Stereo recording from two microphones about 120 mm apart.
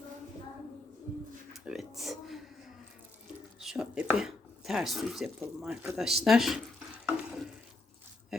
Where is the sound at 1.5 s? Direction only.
Centre (ahead or behind).